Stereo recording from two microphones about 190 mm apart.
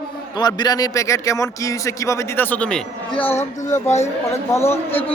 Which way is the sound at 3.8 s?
35° left (ahead or behind).